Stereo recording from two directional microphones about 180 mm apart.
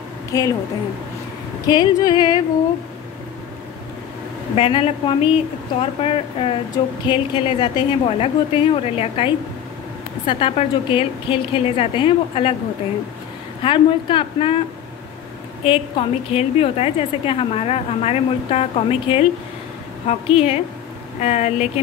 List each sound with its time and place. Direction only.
0.3 s a woman's voice: 20° left (ahead or behind)
1.7 s speech: 20° left (ahead or behind)
4.6 s a woman's voice: 30° left (ahead or behind)
13.6 s speech: 30° left (ahead or behind)
15.6 s a woman's voice: 30° left (ahead or behind)